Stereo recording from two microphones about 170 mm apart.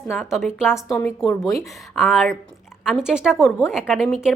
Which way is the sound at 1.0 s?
10° left (ahead or behind).